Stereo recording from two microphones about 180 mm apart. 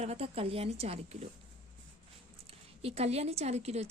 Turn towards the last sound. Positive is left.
turn(degrees=-35)  # may be behind; listen again after turning